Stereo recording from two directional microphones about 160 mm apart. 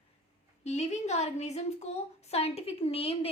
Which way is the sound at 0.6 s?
45° left (ahead or behind).